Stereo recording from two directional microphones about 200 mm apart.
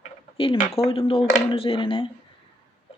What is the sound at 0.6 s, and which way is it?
Speech, 30° left (ahead or behind).